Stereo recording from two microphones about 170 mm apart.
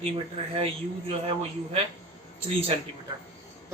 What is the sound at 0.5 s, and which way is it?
Speech, 35° right (ahead or behind).